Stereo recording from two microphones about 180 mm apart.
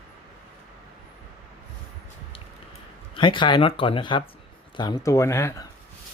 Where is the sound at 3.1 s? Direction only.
25° left (ahead or behind).